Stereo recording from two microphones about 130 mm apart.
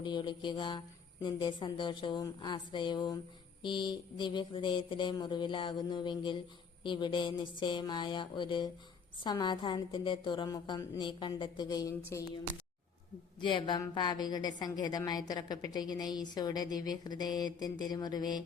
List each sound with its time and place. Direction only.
0.0 s a woman's voice: 35° left (ahead or behind)
13.4 s a woman's voice: 35° left (ahead or behind)